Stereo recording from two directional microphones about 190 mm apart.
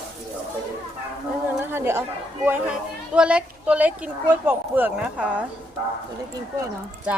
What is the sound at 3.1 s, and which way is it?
Speech, 5° right (ahead or behind).